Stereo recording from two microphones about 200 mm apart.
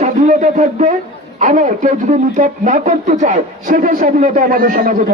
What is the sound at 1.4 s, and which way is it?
A man's voice, 40° right (ahead or behind).